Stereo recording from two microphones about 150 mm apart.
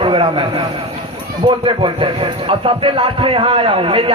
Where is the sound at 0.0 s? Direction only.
35° right (ahead or behind).